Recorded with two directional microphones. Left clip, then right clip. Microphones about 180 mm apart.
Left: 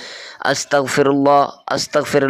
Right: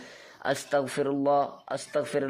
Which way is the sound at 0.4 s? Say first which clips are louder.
Left 11 dB; 35° left (ahead or behind).